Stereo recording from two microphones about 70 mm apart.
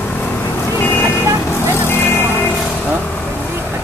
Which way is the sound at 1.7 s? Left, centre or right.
Left.